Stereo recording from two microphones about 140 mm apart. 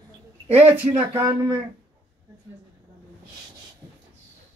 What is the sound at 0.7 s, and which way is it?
Speech, 15° right (ahead or behind).